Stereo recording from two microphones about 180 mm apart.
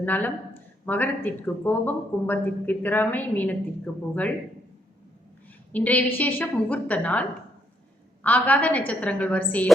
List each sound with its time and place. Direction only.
0.0 s speech: 10° left (ahead or behind)
5.7 s speech: 10° left (ahead or behind)